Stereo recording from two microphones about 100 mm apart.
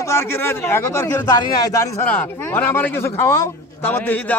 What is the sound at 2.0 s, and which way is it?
A man's voice, 20° left (ahead or behind).